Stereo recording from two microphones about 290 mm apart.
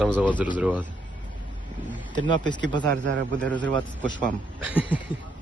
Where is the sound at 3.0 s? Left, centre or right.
Right.